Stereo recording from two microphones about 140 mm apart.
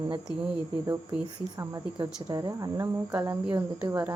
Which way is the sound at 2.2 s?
25° right (ahead or behind).